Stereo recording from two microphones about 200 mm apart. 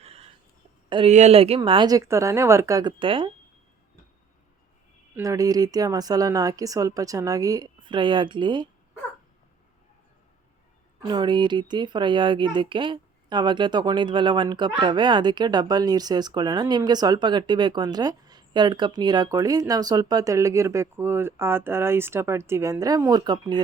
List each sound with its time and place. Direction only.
0.0 s a sound: 30° right (ahead or behind)
0.9 s speech: 25° right (ahead or behind)
5.1 s speech: 15° right (ahead or behind)
11.0 s speech: 20° right (ahead or behind)